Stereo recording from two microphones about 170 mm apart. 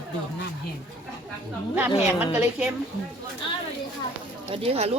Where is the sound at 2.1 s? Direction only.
10° right (ahead or behind).